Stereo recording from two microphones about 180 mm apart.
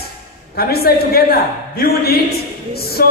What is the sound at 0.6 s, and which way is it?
A man's voice, 60° left (ahead or behind).